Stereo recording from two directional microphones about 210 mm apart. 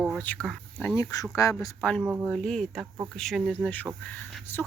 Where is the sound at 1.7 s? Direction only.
Centre (ahead or behind).